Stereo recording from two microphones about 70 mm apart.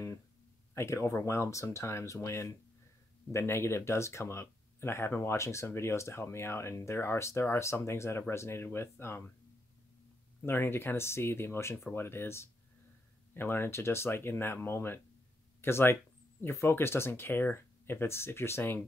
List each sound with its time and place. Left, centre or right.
0.7 s speech: left
10.4 s speech: left